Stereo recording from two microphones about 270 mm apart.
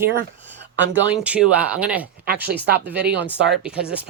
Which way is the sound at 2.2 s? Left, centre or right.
Right.